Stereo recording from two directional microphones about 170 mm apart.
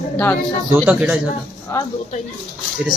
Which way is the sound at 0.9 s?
10° right (ahead or behind).